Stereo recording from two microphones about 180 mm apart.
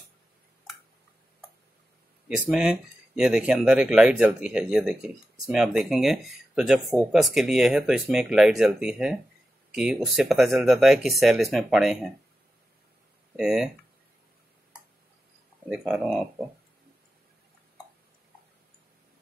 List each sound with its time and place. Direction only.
2.5 s speech: 5° right (ahead or behind)
13.4 s speech: 5° right (ahead or behind)
15.7 s speech: centre (ahead or behind)